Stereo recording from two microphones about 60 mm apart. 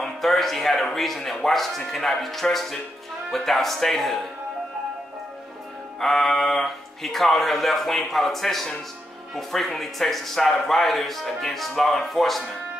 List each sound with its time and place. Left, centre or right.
0.0 s speech: centre
5.9 s speech: centre